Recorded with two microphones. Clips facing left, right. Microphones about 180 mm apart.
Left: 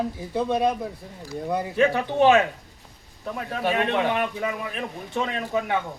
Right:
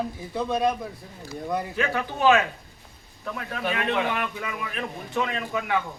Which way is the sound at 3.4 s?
25° left (ahead or behind).